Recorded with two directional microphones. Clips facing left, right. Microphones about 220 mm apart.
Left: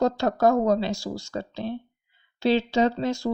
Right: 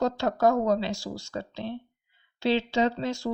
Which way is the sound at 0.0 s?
40° left (ahead or behind).